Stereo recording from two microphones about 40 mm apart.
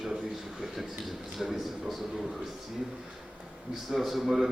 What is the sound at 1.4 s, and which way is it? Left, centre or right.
Speech, centre.